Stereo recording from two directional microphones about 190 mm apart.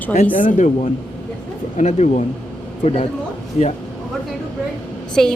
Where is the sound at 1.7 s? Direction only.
35° left (ahead or behind).